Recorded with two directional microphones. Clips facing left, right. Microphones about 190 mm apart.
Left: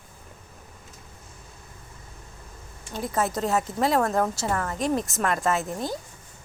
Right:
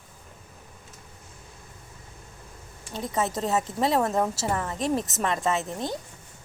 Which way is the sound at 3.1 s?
20° right (ahead or behind).